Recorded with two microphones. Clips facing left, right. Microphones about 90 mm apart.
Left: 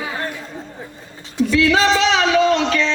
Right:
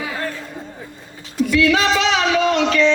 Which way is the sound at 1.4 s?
30° left (ahead or behind).